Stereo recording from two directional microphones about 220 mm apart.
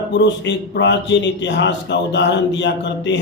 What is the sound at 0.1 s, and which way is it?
A man's voice, 50° left (ahead or behind).